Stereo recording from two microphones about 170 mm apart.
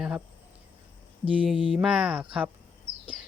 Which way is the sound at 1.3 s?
5° right (ahead or behind).